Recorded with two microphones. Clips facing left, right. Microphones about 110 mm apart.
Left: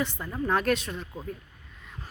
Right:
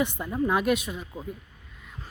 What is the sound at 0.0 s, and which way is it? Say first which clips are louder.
Speech: right 4 dB; 15° right (ahead or behind).